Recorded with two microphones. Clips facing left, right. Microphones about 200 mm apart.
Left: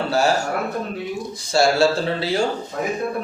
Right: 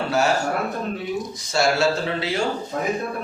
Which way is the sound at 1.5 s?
35° left (ahead or behind).